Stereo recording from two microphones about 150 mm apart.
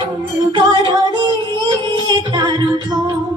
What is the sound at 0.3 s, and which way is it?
Music, 30° right (ahead or behind).